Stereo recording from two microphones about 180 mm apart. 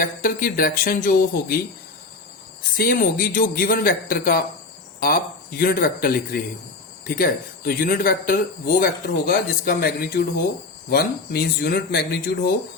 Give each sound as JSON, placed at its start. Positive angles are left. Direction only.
{"t": 0.0, "sound": "speech", "side_deg": 50}
{"t": 2.7, "sound": "speech", "side_deg": 55}